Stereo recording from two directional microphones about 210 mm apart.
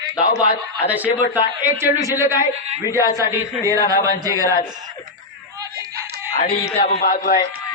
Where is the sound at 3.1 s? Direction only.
15° right (ahead or behind).